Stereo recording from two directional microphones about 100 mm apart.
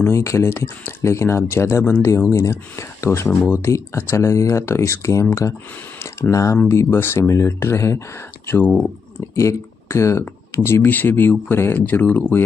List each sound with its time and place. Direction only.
0.0 s speech: 30° left (ahead or behind)